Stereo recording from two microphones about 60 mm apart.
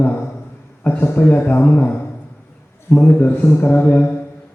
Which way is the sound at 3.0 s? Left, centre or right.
Left.